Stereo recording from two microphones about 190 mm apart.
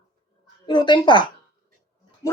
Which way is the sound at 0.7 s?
25° left (ahead or behind).